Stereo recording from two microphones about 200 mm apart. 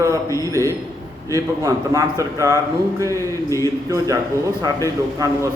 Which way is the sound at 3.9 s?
15° right (ahead or behind).